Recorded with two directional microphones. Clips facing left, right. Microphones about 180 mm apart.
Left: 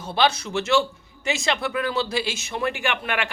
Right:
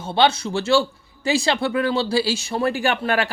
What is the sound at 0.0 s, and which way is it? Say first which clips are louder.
A man's voice: right 3 dB; 25° right (ahead or behind).